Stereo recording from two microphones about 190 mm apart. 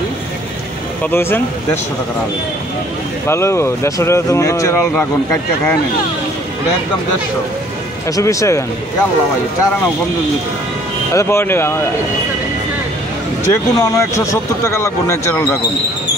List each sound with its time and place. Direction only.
1.1 s speech: 10° left (ahead or behind)
3.3 s speech: 15° left (ahead or behind)
8.2 s speech: 15° left (ahead or behind)
11.1 s speech: 15° left (ahead or behind)
13.5 s speech: 15° left (ahead or behind)